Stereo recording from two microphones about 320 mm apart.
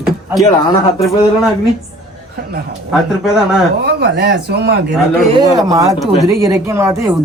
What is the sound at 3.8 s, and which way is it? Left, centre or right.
Speech, right.